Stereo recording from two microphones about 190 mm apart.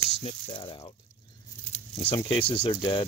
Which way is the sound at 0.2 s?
30° left (ahead or behind).